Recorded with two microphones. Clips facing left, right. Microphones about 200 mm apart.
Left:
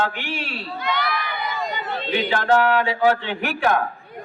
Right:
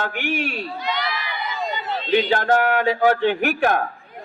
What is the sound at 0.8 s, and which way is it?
Crowd, 55° left (ahead or behind).